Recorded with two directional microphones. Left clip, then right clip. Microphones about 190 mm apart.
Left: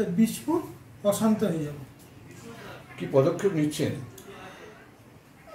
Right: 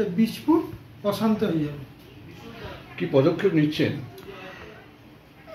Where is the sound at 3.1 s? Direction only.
30° right (ahead or behind).